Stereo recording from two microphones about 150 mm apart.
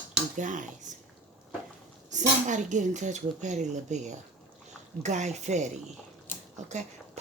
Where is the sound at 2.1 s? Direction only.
55° right (ahead or behind).